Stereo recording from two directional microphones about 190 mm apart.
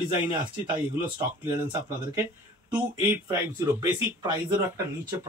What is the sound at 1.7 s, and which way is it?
Speech, 15° right (ahead or behind).